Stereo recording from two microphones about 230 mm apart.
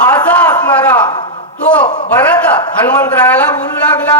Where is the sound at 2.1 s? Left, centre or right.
Centre.